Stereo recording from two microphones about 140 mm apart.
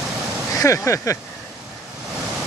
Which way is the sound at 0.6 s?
20° left (ahead or behind).